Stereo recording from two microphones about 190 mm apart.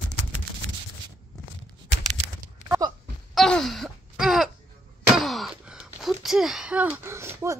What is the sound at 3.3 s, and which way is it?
Wail, centre (ahead or behind).